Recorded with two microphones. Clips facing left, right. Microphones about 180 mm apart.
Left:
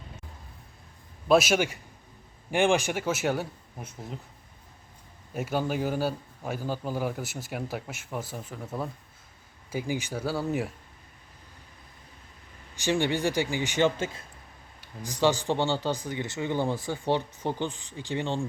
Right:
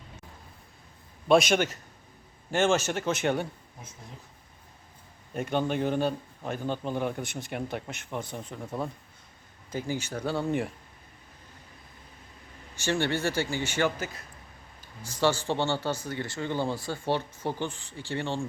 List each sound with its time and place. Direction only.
1.3 s speech: 5° left (ahead or behind)
5.3 s a man's voice: 5° left (ahead or behind)
9.7 s speech: 15° left (ahead or behind)
12.7 s speech: 15° left (ahead or behind)
15.0 s speech: 15° left (ahead or behind)